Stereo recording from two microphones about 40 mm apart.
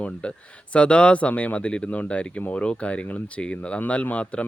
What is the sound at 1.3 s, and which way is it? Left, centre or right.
Speech, left.